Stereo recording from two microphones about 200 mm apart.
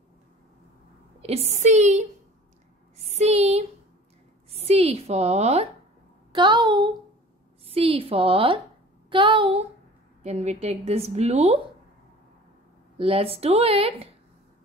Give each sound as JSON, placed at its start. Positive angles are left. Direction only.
{"t": 1.2, "sound": "a woman's voice", "side_deg": -30}
{"t": 3.0, "sound": "a sound", "side_deg": -35}
{"t": 4.5, "sound": "a woman's voice", "side_deg": -30}
{"t": 12.9, "sound": "speech", "side_deg": -25}